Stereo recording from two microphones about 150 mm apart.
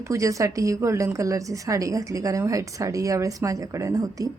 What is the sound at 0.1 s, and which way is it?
Speech, 20° right (ahead or behind).